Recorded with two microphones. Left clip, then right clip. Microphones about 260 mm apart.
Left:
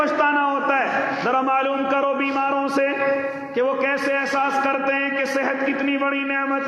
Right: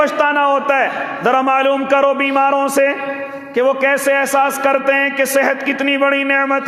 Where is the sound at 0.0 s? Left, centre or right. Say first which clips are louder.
Right 5 dB; right.